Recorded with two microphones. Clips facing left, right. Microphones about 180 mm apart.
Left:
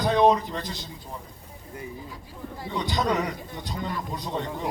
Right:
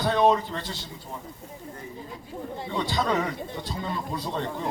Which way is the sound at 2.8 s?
20° left (ahead or behind).